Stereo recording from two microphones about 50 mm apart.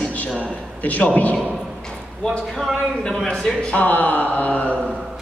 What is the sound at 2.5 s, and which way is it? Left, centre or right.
Speech, centre.